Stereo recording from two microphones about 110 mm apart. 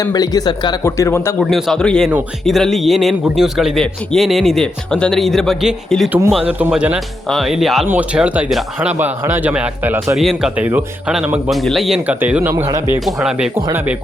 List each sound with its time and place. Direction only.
0.0 s speech: 35° left (ahead or behind)
0.9 s speech: 25° left (ahead or behind)
1.4 s a man's voice: centre (ahead or behind)
6.4 s a man's voice: 15° right (ahead or behind)
7.3 s a man's voice: centre (ahead or behind)
10.2 s a man's voice: centre (ahead or behind)
10.6 s a man's voice: 15° right (ahead or behind)
11.4 s a man's voice: centre (ahead or behind)
12.0 s a man's voice: 15° right (ahead or behind)
12.6 s a man's voice: 30° right (ahead or behind)
13.1 s a man's voice: centre (ahead or behind)